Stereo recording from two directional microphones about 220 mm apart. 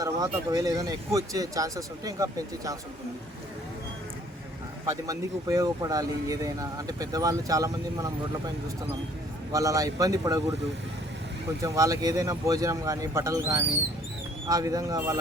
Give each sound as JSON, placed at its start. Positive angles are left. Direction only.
{"t": 0.0, "sound": "speech", "side_deg": -15}
{"t": 4.9, "sound": "speech", "side_deg": -15}
{"t": 9.5, "sound": "speech", "side_deg": -15}
{"t": 11.6, "sound": "speech", "side_deg": -15}